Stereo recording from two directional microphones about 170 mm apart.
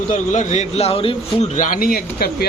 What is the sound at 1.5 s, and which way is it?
Speech, 50° left (ahead or behind).